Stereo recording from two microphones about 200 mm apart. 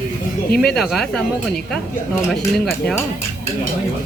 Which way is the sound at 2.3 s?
Centre (ahead or behind).